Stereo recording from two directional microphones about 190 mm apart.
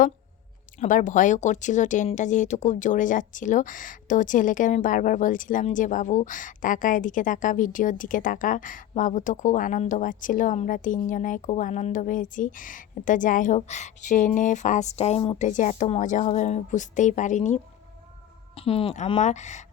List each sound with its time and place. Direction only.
0.8 s speech: 45° left (ahead or behind)
18.5 s speech: 30° left (ahead or behind)